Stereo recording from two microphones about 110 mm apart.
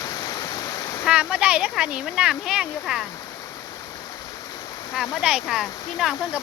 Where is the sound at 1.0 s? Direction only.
10° right (ahead or behind).